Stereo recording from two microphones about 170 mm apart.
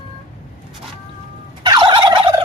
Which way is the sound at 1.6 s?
25° right (ahead or behind).